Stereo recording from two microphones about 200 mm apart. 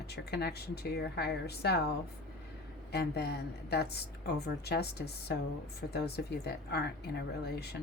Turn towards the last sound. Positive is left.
turn(degrees=55)  # may be behind; listen again after turning